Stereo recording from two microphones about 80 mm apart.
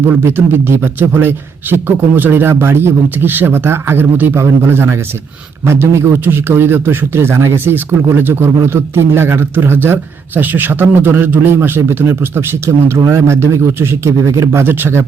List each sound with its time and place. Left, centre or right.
0.0 s a man's voice: right